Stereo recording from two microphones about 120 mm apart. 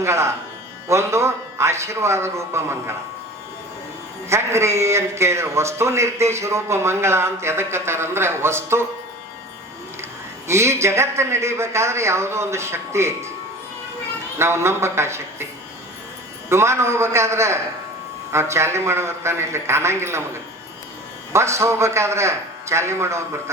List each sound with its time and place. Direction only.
0.0 s a man's voice: 20° right (ahead or behind)
4.3 s a man's voice: 20° right (ahead or behind)
10.5 s a man's voice: 25° right (ahead or behind)
14.3 s a man's voice: 20° right (ahead or behind)
16.5 s a man's voice: 20° right (ahead or behind)